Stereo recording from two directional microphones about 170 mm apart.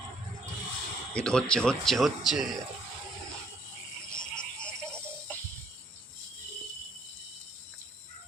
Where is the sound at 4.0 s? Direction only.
5° left (ahead or behind).